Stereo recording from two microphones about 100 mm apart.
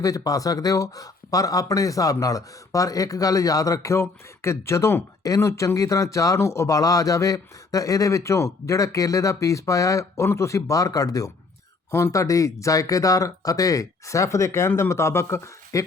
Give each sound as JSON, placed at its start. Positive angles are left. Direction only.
{"t": 0.0, "sound": "speech", "side_deg": 35}